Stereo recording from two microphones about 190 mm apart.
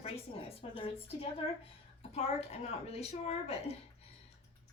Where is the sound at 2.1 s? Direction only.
35° left (ahead or behind).